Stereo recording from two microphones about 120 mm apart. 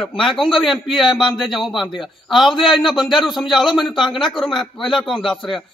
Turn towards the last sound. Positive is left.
turn(degrees=0)  # may be behind; listen again after turning